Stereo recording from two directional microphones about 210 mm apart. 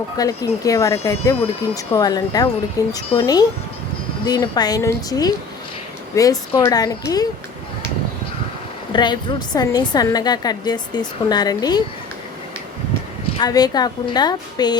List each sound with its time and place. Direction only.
0.2 s a woman's voice: 15° left (ahead or behind)
8.9 s a woman's voice: 20° left (ahead or behind)
13.4 s a woman's voice: 20° left (ahead or behind)